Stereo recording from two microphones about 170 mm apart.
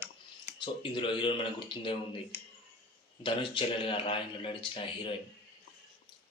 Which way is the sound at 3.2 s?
30° left (ahead or behind).